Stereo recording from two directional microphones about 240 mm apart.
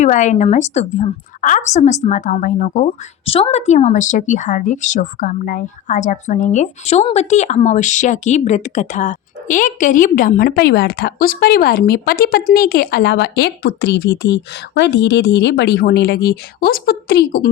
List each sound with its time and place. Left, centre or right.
0.0 s a woman's voice: left
3.2 s a woman's voice: left